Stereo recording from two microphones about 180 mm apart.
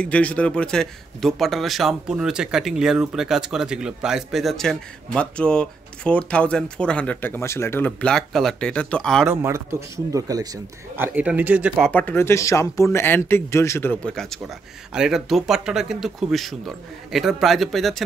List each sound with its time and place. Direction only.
0.0 s speech: 5° left (ahead or behind)
9.3 s a man's voice: 15° right (ahead or behind)
11.1 s a man's voice: 10° right (ahead or behind)
11.8 s speech: 10° left (ahead or behind)